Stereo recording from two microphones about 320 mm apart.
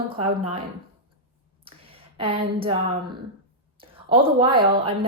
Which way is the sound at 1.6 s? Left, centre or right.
Centre.